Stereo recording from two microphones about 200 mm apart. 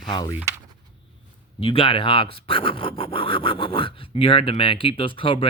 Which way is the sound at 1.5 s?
25° left (ahead or behind).